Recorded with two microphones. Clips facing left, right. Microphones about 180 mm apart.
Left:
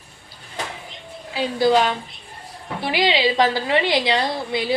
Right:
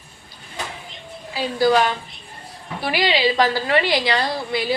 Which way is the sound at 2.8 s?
20° left (ahead or behind).